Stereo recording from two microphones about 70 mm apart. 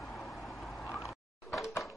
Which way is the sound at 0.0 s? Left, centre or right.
Centre.